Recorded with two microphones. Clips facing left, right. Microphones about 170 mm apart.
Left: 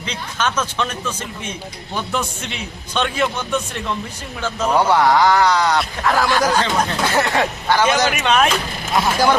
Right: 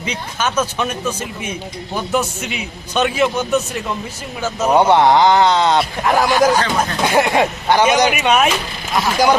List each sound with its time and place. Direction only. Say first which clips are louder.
0.0 s a man's voice: right 1 dB; 10° right (ahead or behind)
4.7 s speech: right 3 dB; 25° right (ahead or behind)